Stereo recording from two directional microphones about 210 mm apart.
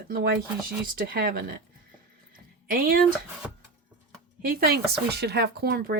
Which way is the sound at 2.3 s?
45° right (ahead or behind).